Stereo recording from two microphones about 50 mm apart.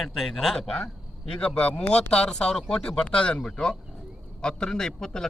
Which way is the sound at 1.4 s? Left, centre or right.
Left.